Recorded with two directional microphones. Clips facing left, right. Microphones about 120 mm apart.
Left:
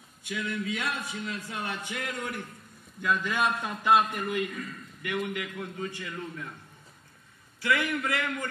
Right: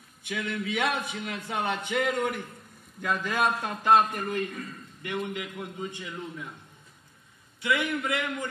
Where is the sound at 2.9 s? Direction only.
45° right (ahead or behind); by 6.6 s 15° right (ahead or behind).